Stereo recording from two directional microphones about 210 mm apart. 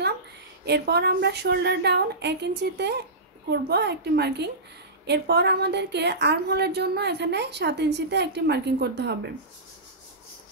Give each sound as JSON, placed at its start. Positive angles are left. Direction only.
{"t": 0.7, "sound": "a woman's voice", "side_deg": -50}